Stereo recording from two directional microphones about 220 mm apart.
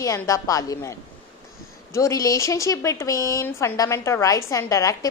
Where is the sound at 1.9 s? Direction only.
15° left (ahead or behind).